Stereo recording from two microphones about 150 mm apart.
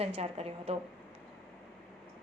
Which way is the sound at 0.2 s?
45° right (ahead or behind).